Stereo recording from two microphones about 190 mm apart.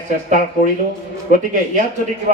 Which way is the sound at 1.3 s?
40° right (ahead or behind).